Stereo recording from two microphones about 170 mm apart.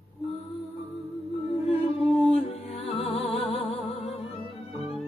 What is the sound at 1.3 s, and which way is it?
Music, 35° left (ahead or behind).